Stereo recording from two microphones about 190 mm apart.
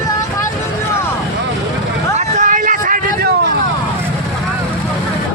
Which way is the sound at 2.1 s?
40° right (ahead or behind).